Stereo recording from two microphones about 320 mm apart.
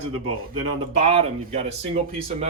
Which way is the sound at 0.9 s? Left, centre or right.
Centre.